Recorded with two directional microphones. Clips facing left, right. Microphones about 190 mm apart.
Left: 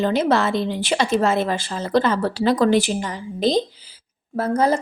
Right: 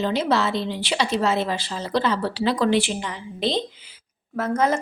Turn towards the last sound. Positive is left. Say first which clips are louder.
# left 3 dB
turn(degrees=35)  # may be behind; listen again after turning